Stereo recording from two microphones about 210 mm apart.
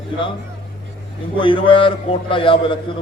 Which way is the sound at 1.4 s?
25° left (ahead or behind).